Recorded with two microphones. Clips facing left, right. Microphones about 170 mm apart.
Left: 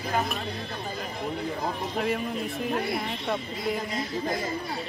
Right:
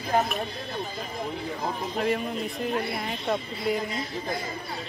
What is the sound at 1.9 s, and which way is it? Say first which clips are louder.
Speech: right 3 dB; centre (ahead or behind).